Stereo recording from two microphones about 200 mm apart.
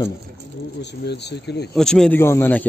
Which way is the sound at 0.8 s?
55° left (ahead or behind).